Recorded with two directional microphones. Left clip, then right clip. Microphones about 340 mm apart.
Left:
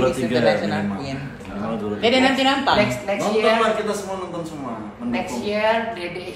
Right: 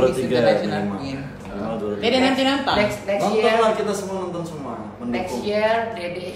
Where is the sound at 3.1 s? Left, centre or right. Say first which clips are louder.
Right 1 dB; centre.